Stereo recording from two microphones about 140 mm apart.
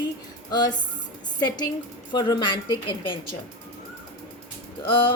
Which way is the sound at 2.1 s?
30° left (ahead or behind).